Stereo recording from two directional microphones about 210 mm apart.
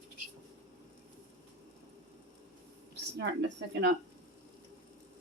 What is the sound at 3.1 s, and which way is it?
Speech, 55° right (ahead or behind).